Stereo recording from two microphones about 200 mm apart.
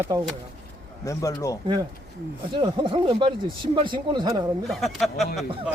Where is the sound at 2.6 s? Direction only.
25° right (ahead or behind).